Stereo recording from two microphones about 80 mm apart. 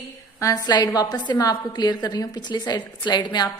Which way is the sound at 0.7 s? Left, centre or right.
Left.